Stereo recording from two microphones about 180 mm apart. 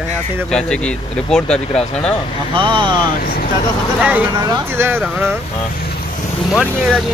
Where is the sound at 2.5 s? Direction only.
25° right (ahead or behind).